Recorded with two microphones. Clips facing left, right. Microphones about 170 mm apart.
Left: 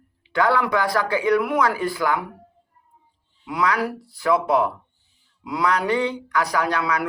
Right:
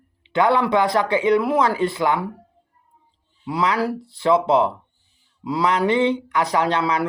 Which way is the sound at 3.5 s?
30° right (ahead or behind).